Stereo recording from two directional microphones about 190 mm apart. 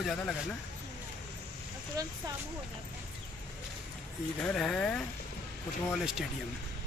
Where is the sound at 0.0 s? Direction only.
Centre (ahead or behind).